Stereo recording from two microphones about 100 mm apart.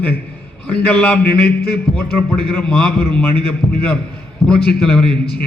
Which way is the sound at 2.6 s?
10° left (ahead or behind).